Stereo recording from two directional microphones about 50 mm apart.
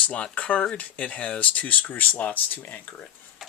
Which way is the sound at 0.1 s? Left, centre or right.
Left.